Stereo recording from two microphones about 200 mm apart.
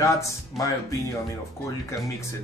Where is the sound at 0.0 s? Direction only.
15° left (ahead or behind).